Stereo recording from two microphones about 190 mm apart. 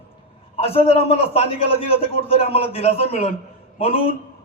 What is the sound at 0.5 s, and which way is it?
A man's voice, 30° left (ahead or behind).